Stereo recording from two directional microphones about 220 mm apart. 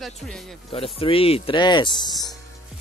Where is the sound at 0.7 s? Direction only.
25° left (ahead or behind).